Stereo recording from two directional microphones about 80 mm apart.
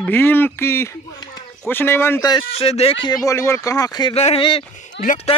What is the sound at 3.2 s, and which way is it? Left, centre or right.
Speech, left.